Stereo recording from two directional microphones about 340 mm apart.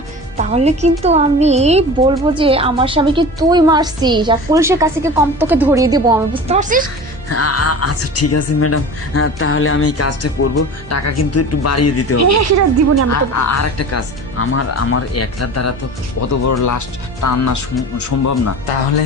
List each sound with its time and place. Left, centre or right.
0.3 s a woman's voice: centre
7.3 s speech: left
12.2 s a woman's voice: right
13.1 s speech: left